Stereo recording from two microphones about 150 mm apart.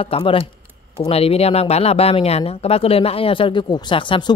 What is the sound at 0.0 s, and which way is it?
Speech, 40° left (ahead or behind).